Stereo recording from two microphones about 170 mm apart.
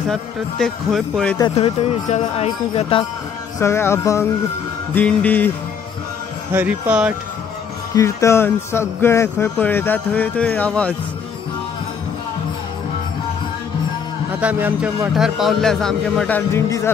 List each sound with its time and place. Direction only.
0.1 s speech: centre (ahead or behind)
1.5 s speech: 35° left (ahead or behind)
3.5 s speech: 15° left (ahead or behind)
6.5 s speech: 10° right (ahead or behind)
7.9 s speech: 15° left (ahead or behind)
14.4 s speech: 10° right (ahead or behind); by 16.9 s 15° left (ahead or behind)